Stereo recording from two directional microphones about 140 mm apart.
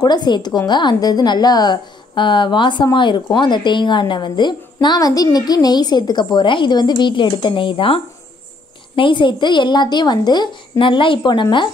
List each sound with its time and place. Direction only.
0.0 s a woman's voice: 30° left (ahead or behind)